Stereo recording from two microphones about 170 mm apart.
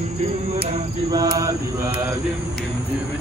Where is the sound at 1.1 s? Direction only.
25° right (ahead or behind).